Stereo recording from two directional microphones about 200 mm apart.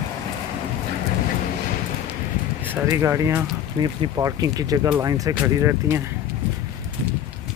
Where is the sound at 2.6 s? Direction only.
10° right (ahead or behind).